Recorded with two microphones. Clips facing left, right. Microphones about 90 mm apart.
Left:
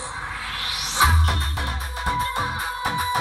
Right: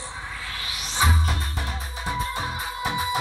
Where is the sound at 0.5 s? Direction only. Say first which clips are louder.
Left 5 dB; 70° left (ahead or behind); by 2.6 s 55° left (ahead or behind).